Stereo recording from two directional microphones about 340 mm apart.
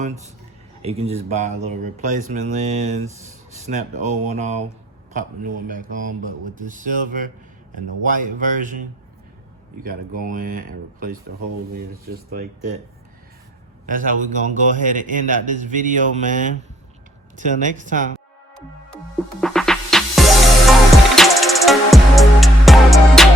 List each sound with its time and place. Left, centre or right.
0.8 s a man's voice: centre
9.8 s a man's voice: right
13.8 s a man's voice: right
19.4 s music: centre